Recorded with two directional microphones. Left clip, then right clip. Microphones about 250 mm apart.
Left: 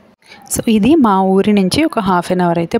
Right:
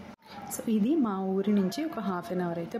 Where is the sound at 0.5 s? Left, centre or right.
Left.